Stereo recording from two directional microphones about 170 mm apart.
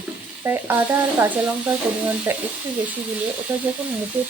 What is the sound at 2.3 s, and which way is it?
Speech, 10° right (ahead or behind).